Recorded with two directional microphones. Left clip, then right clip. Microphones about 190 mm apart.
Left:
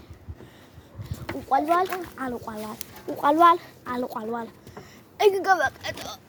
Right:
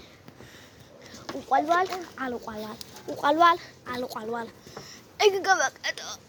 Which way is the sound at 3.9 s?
40° left (ahead or behind).